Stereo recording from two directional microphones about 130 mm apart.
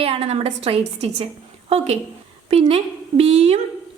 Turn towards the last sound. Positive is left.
turn(degrees=-55)  # may be behind; listen again after turning